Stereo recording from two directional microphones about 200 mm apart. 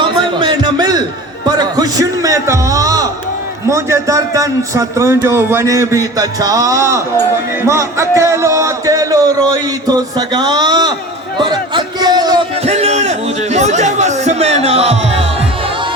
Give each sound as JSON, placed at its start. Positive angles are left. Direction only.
{"t": 0.0, "sound": "music", "side_deg": -25}
{"t": 3.7, "sound": "a man's voice", "side_deg": -15}
{"t": 11.3, "sound": "a sound", "side_deg": -25}
{"t": 12.6, "sound": "chatter", "side_deg": -30}